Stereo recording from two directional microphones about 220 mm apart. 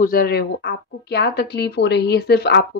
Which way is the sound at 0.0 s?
40° left (ahead or behind).